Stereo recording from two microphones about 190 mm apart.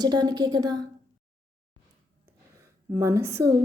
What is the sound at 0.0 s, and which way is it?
Speech, 20° right (ahead or behind).